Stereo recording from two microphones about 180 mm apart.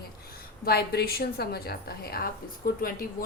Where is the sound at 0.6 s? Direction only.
60° left (ahead or behind).